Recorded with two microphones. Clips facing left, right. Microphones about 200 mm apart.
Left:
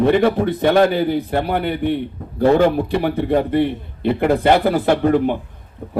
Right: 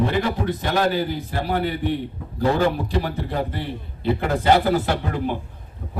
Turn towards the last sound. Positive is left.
turn(degrees=55)  # may be behind; listen again after turning